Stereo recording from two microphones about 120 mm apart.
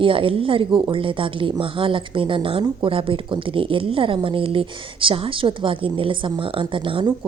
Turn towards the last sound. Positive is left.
turn(degrees=-45)  # may be behind; listen again after turning